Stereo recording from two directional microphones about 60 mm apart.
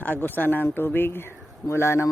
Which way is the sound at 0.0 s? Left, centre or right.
Left.